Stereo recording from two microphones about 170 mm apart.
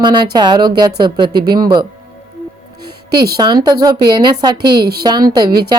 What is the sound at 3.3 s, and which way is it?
Speech, 25° right (ahead or behind).